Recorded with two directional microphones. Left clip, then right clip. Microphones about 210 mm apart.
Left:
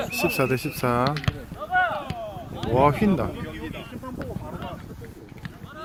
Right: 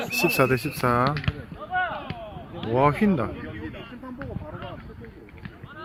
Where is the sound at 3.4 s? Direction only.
25° right (ahead or behind).